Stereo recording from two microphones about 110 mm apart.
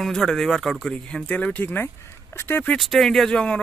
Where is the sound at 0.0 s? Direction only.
Centre (ahead or behind).